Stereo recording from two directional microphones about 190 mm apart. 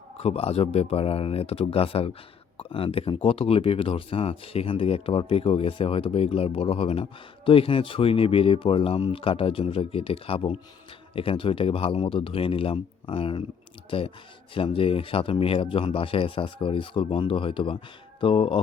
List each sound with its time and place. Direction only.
0.2 s speech: 30° left (ahead or behind)